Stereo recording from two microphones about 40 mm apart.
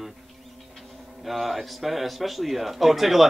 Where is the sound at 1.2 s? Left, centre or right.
Centre.